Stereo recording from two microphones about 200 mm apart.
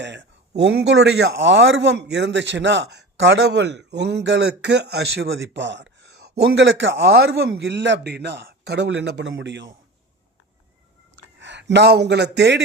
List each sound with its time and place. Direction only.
0.0 s a man's voice: 60° right (ahead or behind)
11.2 s speech: 65° right (ahead or behind)